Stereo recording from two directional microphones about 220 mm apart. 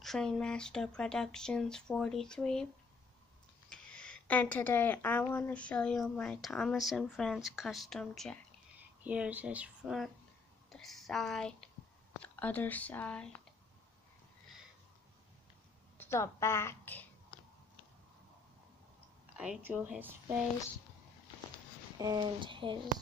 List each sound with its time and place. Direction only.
0.0 s speech: centre (ahead or behind)
3.7 s speech: 5° left (ahead or behind)
16.0 s a woman's voice: 10° left (ahead or behind)
19.3 s speech: 5° right (ahead or behind)
21.9 s speech: 20° right (ahead or behind)